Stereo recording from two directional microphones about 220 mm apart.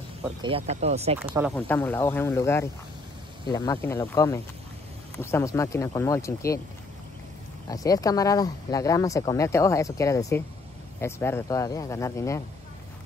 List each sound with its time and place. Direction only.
0.4 s speech: 25° right (ahead or behind)
1.2 s speech: 5° right (ahead or behind)
1.5 s speech: 10° left (ahead or behind)
7.6 s speech: 15° left (ahead or behind)